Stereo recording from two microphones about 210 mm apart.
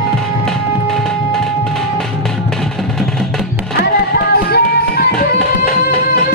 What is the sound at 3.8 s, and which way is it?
Music, 50° left (ahead or behind).